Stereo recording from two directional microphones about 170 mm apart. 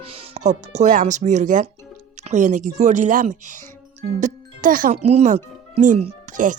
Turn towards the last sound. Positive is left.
turn(degrees=-50)  # may be behind; listen again after turning